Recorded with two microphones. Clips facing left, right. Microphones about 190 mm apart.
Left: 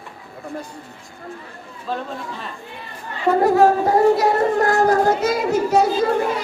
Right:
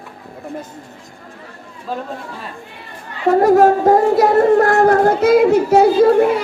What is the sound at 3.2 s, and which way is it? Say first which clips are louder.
Child singing: right 4 dB; 45° right (ahead or behind).